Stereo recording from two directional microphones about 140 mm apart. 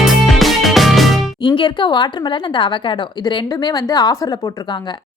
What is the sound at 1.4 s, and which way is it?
Speech, 35° left (ahead or behind).